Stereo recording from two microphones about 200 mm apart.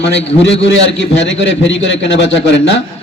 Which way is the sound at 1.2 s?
65° left (ahead or behind).